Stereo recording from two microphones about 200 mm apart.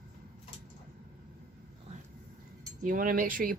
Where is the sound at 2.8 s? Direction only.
45° right (ahead or behind).